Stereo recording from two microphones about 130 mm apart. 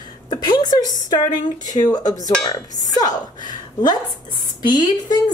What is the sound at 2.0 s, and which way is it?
A woman's voice, 30° left (ahead or behind).